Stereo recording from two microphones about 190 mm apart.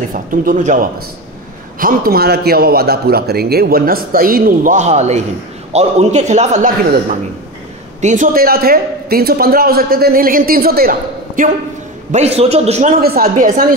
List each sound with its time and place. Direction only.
0.1 s a man's voice: 45° right (ahead or behind)
12.1 s a man's voice: 35° right (ahead or behind)
13.0 s a man's voice: 50° right (ahead or behind)